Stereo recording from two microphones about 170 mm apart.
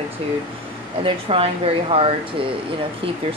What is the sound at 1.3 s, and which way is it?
Speech, 35° right (ahead or behind).